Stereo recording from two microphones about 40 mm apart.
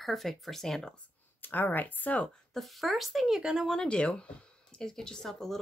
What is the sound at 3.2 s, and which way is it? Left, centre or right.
Speech, centre.